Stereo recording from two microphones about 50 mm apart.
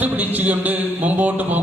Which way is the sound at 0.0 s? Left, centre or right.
Right.